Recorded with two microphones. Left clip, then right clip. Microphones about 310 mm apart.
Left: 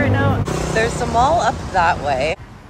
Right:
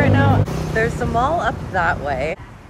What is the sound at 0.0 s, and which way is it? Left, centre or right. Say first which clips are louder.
Speech: right 1 dB; centre.